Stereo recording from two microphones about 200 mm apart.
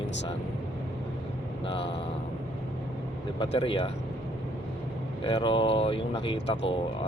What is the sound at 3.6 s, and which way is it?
Speech, 25° left (ahead or behind).